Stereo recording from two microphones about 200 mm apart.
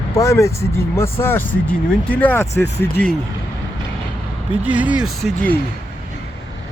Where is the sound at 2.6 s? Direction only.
55° left (ahead or behind).